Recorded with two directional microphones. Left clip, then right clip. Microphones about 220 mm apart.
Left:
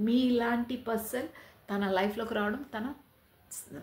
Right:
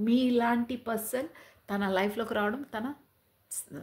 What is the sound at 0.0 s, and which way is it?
A woman's voice, 45° right (ahead or behind).